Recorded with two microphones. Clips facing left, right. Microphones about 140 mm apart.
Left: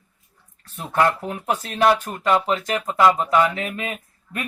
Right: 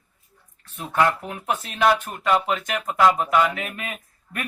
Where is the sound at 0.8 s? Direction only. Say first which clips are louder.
Left 1 dB; 35° left (ahead or behind).